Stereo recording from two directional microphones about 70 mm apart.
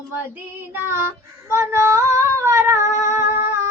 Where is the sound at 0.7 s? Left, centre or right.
Right.